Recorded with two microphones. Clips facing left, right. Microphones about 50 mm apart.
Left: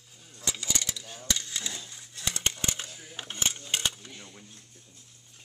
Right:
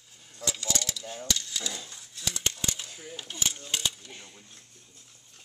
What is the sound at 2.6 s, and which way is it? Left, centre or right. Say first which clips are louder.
Coin: left 1 dB; left.